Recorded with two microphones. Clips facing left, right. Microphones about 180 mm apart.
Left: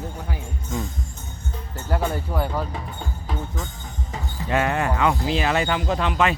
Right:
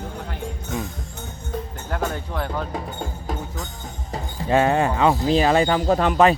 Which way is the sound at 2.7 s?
40° right (ahead or behind).